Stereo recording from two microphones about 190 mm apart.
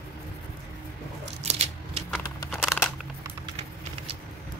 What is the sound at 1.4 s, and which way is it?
Scissors, 35° right (ahead or behind).